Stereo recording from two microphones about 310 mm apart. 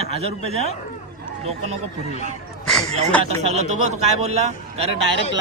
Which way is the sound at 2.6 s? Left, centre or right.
Centre.